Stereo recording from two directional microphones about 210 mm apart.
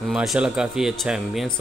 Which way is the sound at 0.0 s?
Centre (ahead or behind).